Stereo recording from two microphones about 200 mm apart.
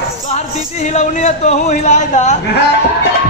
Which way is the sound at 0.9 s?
35° left (ahead or behind).